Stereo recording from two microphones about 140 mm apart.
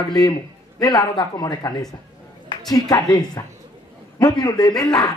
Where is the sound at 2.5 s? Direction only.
35° left (ahead or behind).